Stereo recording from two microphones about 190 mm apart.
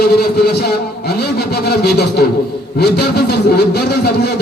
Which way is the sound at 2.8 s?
60° left (ahead or behind).